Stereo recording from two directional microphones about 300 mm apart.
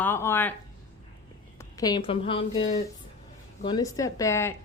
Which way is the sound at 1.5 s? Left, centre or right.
Centre.